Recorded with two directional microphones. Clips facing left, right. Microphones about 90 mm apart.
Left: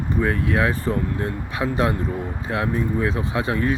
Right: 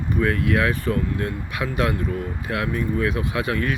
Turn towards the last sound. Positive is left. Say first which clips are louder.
# left 2 dB
turn(degrees=25)  # may be behind; listen again after turning